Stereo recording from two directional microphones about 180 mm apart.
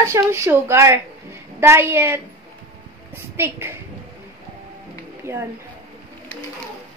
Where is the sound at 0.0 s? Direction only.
15° right (ahead or behind).